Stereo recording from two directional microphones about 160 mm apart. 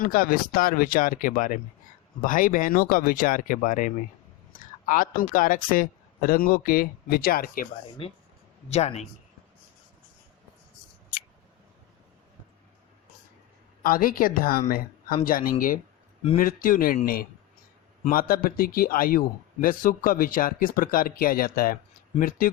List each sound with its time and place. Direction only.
0.0 s speech: 65° left (ahead or behind)
8.0 s speech: 35° left (ahead or behind)
13.8 s speech: 60° left (ahead or behind)